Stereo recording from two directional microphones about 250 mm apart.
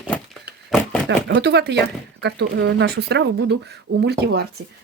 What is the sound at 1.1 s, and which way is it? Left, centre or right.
Speech, right.